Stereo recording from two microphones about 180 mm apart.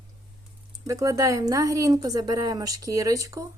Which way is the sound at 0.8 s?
20° right (ahead or behind).